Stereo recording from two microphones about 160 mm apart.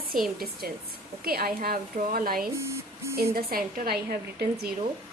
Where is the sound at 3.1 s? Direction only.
70° right (ahead or behind).